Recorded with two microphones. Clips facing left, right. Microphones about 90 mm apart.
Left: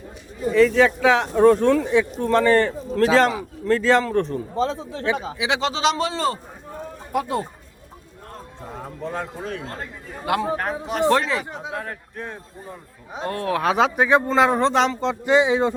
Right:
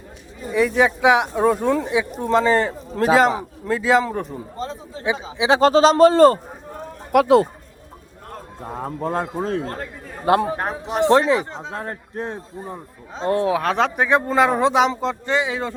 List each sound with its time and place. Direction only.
0.5 s speech: 15° right (ahead or behind)
4.5 s speech: 90° left
5.5 s a man's voice: 45° right (ahead or behind)
7.1 s speech: 85° right
8.7 s a man's voice: 45° right (ahead or behind); by 13.5 s 20° right (ahead or behind)
13.6 s speech: 5° left (ahead or behind)
15.3 s speech: 20° left (ahead or behind)